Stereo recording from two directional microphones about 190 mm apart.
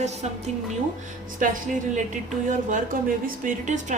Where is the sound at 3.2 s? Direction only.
45° right (ahead or behind).